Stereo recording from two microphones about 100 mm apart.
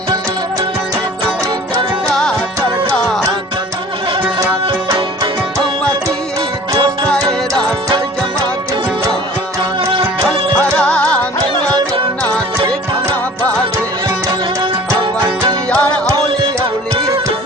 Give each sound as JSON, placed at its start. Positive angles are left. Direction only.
{"t": 2.0, "sound": "music", "side_deg": 10}
{"t": 7.6, "sound": "music", "side_deg": -50}
{"t": 10.5, "sound": "music", "side_deg": 10}
{"t": 15.7, "sound": "music", "side_deg": 15}
{"t": 16.1, "sound": "music", "side_deg": -35}